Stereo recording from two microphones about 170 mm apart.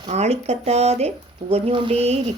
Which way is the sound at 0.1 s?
40° right (ahead or behind).